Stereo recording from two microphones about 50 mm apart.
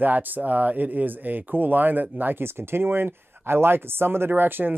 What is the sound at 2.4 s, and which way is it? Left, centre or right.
Speech, right.